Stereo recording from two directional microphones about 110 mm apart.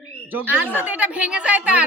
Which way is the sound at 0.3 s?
15° right (ahead or behind).